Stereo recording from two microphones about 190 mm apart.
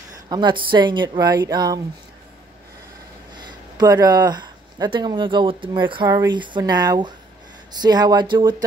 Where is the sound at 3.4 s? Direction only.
20° right (ahead or behind).